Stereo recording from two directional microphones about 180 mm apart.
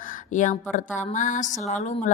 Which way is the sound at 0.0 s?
45° left (ahead or behind).